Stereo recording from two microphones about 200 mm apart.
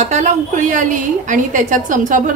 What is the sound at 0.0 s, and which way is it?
A woman's voice, 35° right (ahead or behind).